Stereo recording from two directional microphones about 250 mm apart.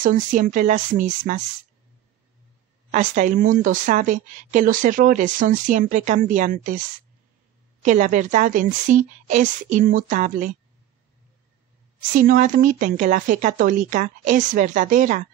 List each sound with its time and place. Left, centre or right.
0.0 s a woman's voice: right
2.9 s a woman's voice: right
7.8 s a woman's voice: right
12.2 s a woman's voice: right